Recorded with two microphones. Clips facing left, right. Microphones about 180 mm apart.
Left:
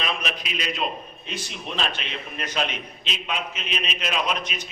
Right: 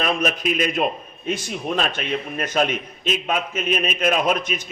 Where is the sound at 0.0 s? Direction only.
45° right (ahead or behind).